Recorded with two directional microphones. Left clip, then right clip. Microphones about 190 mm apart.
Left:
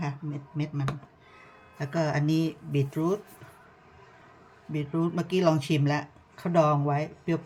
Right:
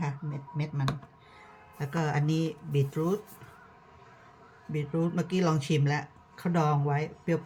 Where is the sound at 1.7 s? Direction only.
20° left (ahead or behind).